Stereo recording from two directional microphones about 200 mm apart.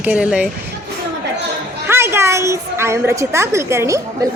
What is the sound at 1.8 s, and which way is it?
A woman's voice, 10° right (ahead or behind).